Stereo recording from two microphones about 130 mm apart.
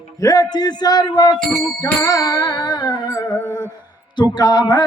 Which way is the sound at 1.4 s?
Centre (ahead or behind).